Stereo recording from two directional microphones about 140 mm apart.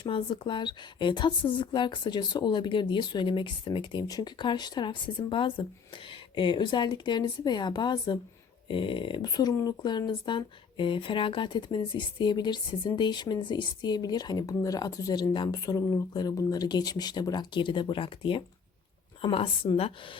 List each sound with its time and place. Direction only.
0.0 s a woman's voice: 40° left (ahead or behind)